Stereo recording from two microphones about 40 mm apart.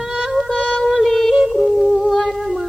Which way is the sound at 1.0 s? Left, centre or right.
Centre.